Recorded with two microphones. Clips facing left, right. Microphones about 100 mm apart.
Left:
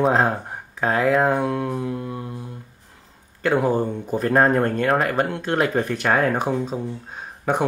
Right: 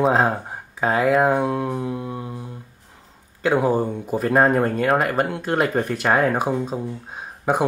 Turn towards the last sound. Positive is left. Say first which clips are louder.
# right 1 dB
turn(degrees=-5)  # may be behind; listen again after turning